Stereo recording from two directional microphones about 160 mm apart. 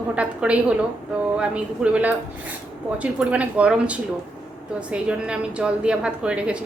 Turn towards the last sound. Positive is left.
turn(degrees=-5)  # may be behind; listen again after turning